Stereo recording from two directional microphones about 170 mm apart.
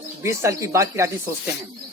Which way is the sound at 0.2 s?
15° right (ahead or behind).